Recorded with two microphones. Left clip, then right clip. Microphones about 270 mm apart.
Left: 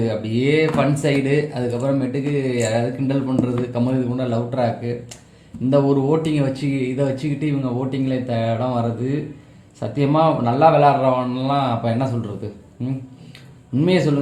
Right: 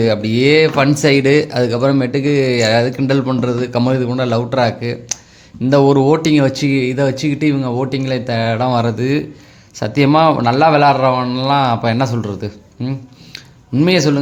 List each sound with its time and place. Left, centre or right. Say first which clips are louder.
0.0 s speech: right 8 dB; right
9.8 s speech: right 6 dB; right
13.3 s a sound: right 6 dB; right